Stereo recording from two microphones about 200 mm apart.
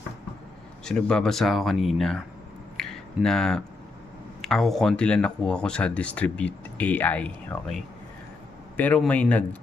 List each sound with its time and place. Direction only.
0.9 s speech: 5° left (ahead or behind)
2.7 s a sound: centre (ahead or behind)
4.4 s speech: centre (ahead or behind)